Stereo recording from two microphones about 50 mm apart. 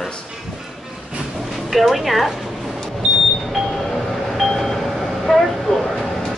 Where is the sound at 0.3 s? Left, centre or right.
Centre.